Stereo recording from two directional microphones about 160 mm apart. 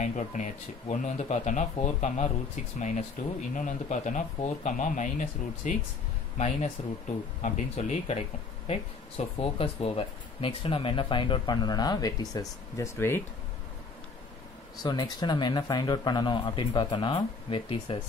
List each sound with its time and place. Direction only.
0.0 s speech: 50° left (ahead or behind)
6.3 s speech: 45° left (ahead or behind)
9.2 s speech: 40° left (ahead or behind); by 13.2 s 15° left (ahead or behind)
14.8 s speech: 25° left (ahead or behind)